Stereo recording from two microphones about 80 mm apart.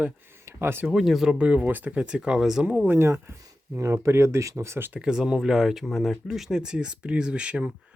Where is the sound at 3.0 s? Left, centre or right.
Right.